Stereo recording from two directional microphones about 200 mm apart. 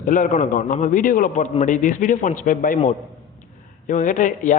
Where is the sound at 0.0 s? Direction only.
40° left (ahead or behind).